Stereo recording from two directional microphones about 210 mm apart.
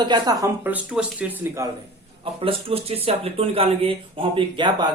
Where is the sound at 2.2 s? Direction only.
25° right (ahead or behind).